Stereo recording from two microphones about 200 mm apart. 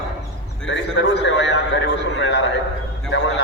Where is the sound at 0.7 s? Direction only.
60° left (ahead or behind).